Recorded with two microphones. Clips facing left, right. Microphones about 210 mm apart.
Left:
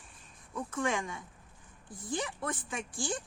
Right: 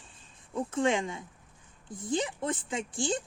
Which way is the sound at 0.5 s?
25° right (ahead or behind).